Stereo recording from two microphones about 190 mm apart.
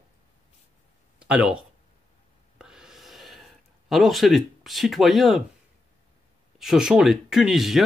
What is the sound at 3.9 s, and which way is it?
Speech, centre (ahead or behind).